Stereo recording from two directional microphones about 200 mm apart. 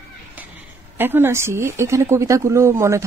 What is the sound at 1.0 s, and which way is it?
Speech, 10° right (ahead or behind).